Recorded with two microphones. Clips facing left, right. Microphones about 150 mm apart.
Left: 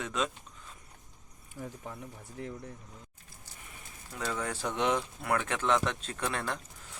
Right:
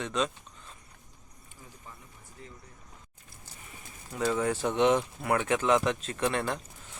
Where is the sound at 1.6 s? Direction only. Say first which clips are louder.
Left 12 dB; 80° left.